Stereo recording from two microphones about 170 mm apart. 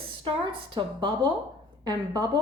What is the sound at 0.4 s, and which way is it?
A woman's voice, 25° right (ahead or behind).